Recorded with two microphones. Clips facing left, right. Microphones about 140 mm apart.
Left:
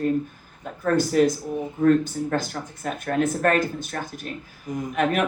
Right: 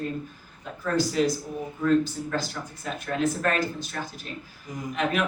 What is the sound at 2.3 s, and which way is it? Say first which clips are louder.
Speech: left 4 dB; 55° left (ahead or behind).